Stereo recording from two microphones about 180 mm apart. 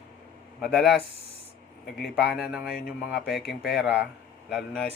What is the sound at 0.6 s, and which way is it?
Speech, centre (ahead or behind).